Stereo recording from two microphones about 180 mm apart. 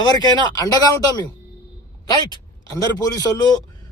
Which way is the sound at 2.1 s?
20° left (ahead or behind).